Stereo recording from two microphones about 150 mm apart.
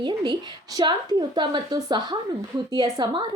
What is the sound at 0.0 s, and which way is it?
A woman's voice, 30° right (ahead or behind).